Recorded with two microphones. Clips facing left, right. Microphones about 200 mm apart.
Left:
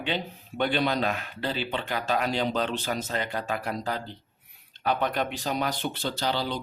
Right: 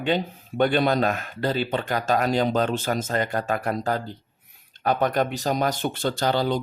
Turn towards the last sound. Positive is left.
turn(degrees=-50)  # may be behind; listen again after turning